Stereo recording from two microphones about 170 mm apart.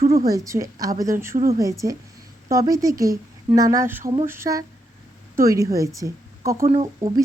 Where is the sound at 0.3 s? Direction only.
20° right (ahead or behind).